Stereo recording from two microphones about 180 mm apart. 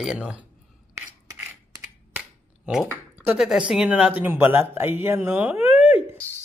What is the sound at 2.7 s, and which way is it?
Speech, 5° right (ahead or behind).